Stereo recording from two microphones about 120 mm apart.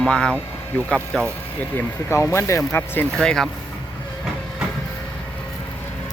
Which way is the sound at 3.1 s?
5° left (ahead or behind).